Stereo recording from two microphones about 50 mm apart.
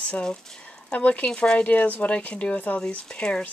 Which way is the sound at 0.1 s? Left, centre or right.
Left.